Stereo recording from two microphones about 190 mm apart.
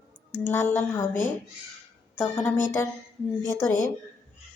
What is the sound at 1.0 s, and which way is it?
Speech, 45° left (ahead or behind).